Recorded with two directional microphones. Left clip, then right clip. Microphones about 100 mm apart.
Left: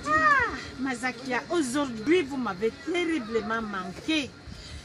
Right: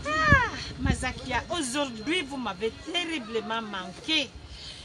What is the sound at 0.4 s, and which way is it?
A woman's voice, 25° right (ahead or behind).